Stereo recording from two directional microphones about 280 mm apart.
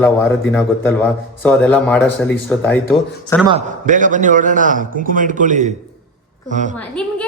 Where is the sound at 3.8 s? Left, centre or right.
Right.